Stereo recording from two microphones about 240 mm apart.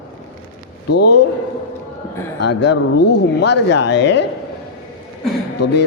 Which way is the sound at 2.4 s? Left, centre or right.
Left.